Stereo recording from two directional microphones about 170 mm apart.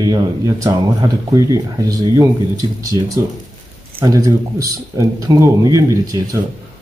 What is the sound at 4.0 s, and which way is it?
Speech, 20° right (ahead or behind).